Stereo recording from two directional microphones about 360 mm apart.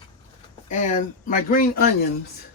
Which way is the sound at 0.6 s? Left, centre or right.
Left.